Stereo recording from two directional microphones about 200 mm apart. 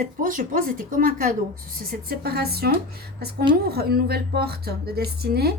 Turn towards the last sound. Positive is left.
turn(degrees=-50)  # may be behind; listen again after turning